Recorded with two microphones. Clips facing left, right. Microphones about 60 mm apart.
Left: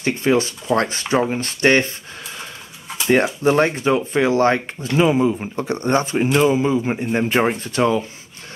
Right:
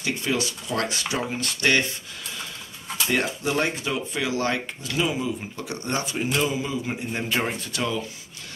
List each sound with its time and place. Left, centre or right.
0.0 s speech: left
3.4 s speech: left